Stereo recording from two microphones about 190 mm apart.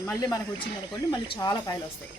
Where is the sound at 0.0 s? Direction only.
15° left (ahead or behind).